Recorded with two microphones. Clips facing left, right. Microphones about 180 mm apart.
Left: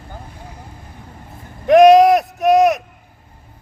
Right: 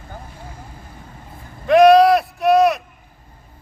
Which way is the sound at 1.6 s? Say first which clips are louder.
Left 2 dB; 20° left (ahead or behind).